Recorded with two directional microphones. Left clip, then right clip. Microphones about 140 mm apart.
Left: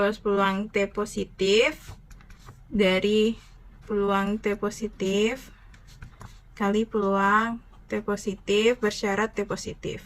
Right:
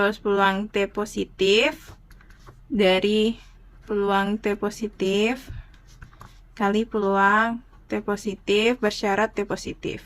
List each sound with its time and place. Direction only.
0.0 s speech: 45° right (ahead or behind)
6.5 s speech: 45° right (ahead or behind)